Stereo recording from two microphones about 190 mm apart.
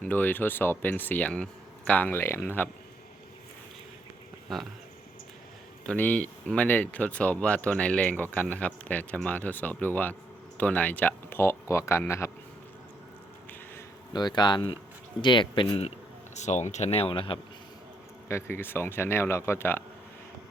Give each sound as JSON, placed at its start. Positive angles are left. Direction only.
{"t": 0.0, "sound": "speech", "side_deg": 10}
{"t": 4.5, "sound": "speech", "side_deg": 0}
{"t": 5.8, "sound": "speech", "side_deg": 5}
{"t": 14.1, "sound": "speech", "side_deg": 25}
{"t": 16.3, "sound": "speech", "side_deg": 40}
{"t": 18.3, "sound": "speech", "side_deg": 15}